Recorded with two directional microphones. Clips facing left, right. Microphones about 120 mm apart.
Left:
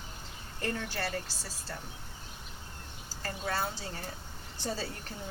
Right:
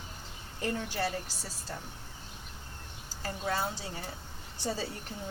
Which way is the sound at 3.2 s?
15° right (ahead or behind).